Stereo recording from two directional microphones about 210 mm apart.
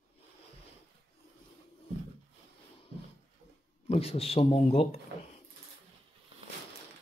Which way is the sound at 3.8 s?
30° left (ahead or behind).